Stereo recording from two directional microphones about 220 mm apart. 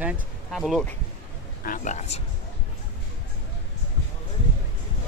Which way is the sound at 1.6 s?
35° left (ahead or behind).